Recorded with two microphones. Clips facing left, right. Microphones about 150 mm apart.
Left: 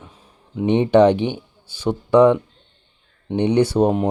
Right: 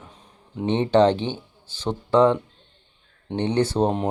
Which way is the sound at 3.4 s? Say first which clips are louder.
Left 5 dB; 15° left (ahead or behind).